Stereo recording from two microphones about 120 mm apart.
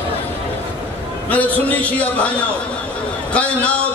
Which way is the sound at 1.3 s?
15° left (ahead or behind).